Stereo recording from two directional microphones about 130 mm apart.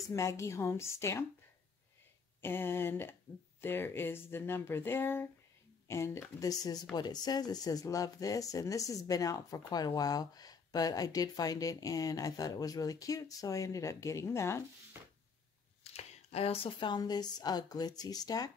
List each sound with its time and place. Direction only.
0.1 s speech: 20° left (ahead or behind)
2.4 s speech: 15° left (ahead or behind)
15.8 s speech: 55° left (ahead or behind); by 18.5 s 30° left (ahead or behind)